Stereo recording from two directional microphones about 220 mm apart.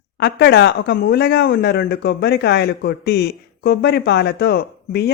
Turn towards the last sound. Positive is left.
turn(degrees=45)  # may be behind; listen again after turning